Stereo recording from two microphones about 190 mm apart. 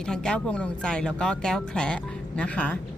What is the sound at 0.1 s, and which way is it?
Speech, 5° left (ahead or behind).